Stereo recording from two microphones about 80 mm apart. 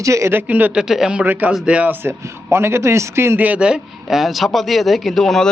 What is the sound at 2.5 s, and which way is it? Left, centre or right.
Speech, right.